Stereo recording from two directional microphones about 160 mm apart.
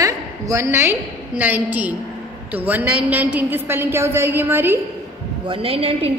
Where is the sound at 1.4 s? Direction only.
10° right (ahead or behind).